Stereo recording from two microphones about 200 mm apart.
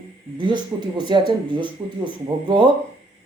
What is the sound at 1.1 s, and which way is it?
Speech, 25° right (ahead or behind).